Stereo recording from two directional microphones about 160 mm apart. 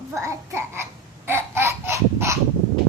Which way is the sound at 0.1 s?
20° right (ahead or behind).